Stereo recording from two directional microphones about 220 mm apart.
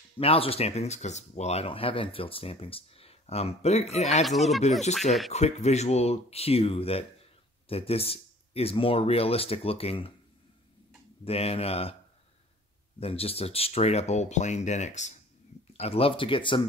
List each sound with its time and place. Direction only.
0.2 s speech: 25° left (ahead or behind)
4.3 s speech: centre (ahead or behind)
5.3 s speech: 30° left (ahead or behind)
11.2 s speech: 25° left (ahead or behind)
13.0 s speech: 25° left (ahead or behind)